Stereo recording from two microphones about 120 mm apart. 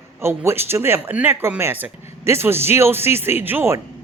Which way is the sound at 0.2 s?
20° right (ahead or behind).